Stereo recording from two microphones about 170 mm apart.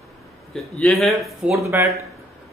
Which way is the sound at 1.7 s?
15° right (ahead or behind).